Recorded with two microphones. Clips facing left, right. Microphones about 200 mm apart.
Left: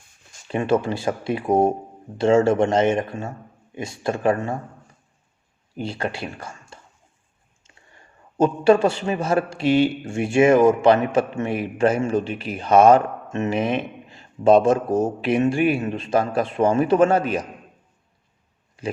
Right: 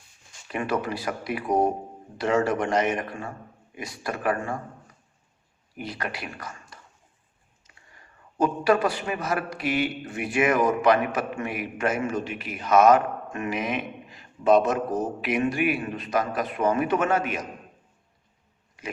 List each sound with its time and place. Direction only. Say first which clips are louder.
0.4 s a man's voice: left 7 dB; 25° left (ahead or behind)
5.7 s a man's voice: left 6 dB; 30° left (ahead or behind)